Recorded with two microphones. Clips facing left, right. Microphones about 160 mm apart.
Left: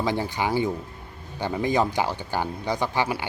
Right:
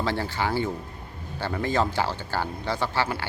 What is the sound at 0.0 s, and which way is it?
Speech, 15° left (ahead or behind).